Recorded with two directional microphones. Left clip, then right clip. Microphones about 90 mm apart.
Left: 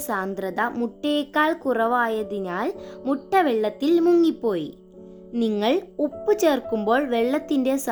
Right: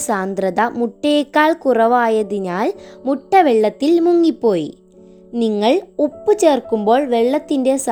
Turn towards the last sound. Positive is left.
turn(degrees=-50)  # may be behind; listen again after turning